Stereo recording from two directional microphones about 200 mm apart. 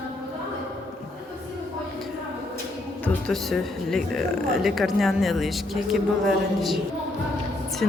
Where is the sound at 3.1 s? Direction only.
5° left (ahead or behind).